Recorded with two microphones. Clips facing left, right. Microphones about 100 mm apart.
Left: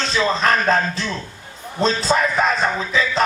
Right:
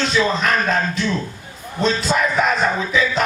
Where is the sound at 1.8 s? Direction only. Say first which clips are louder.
Left 1 dB; 35° left (ahead or behind).